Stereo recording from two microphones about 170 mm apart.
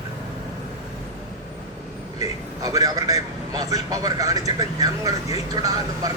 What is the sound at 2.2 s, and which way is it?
A man's voice, 20° right (ahead or behind).